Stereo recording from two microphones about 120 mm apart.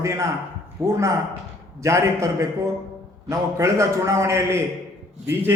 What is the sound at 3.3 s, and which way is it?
A man's voice, 25° right (ahead or behind).